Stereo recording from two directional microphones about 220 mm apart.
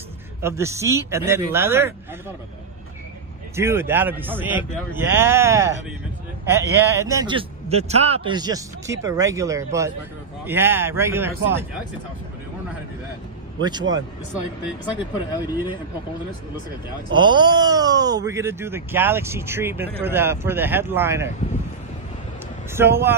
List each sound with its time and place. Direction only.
0.4 s speech: 10° right (ahead or behind)
3.5 s speech: 10° right (ahead or behind)
13.6 s speech: 20° right (ahead or behind)
15.4 s speech: 10° right (ahead or behind)
17.1 s speech: 20° right (ahead or behind)
22.7 s speech: 10° right (ahead or behind)